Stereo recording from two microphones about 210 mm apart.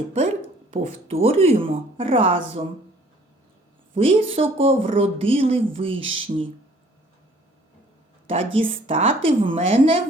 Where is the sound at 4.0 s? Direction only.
25° right (ahead or behind).